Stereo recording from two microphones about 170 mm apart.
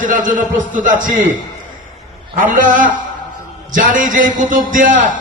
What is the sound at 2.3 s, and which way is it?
A man's voice, 50° right (ahead or behind).